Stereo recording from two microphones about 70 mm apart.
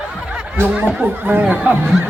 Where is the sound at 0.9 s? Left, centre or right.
Right.